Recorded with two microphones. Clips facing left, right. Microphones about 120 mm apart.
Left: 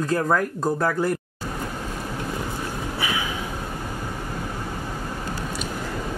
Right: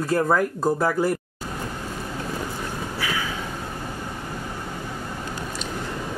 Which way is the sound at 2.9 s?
20° left (ahead or behind).